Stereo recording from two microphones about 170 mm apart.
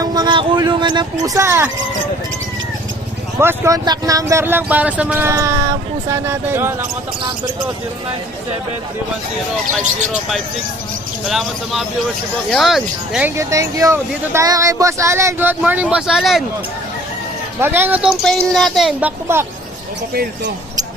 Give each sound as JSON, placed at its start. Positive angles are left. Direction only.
{"t": 0.0, "sound": "speech", "side_deg": -25}
{"t": 3.3, "sound": "speech", "side_deg": -15}
{"t": 10.1, "sound": "speech", "side_deg": 0}
{"t": 13.3, "sound": "speech", "side_deg": -15}
{"t": 17.6, "sound": "speech", "side_deg": -10}